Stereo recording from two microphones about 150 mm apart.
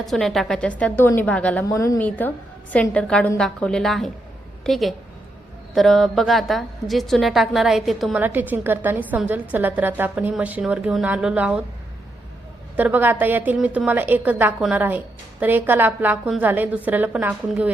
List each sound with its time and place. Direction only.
0.1 s a woman's voice: centre (ahead or behind)
1.6 s a woman's voice: 20° left (ahead or behind)
2.0 s a woman's voice: 10° left (ahead or behind)
8.2 s a woman's voice: 10° right (ahead or behind)
12.7 s a woman's voice: 10° right (ahead or behind)